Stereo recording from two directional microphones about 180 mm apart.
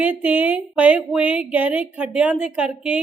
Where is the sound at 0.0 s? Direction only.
10° right (ahead or behind).